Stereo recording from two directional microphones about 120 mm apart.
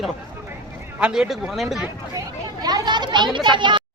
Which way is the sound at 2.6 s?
35° right (ahead or behind).